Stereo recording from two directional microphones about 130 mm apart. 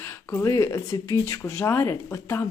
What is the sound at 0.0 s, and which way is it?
Speech, 20° left (ahead or behind).